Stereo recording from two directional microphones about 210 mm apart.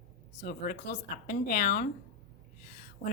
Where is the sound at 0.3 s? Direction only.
40° left (ahead or behind).